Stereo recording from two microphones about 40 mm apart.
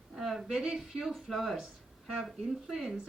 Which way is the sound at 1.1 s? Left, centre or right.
Centre.